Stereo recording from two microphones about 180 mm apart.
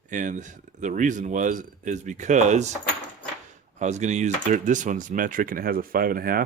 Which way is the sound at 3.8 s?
40° right (ahead or behind).